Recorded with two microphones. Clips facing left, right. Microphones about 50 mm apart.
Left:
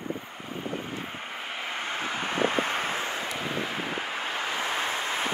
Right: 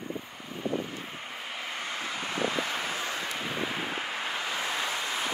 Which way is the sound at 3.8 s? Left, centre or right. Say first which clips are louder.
Left 2 dB; left.